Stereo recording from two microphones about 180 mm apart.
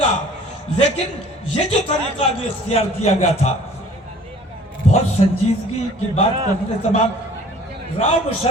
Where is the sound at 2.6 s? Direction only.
35° left (ahead or behind).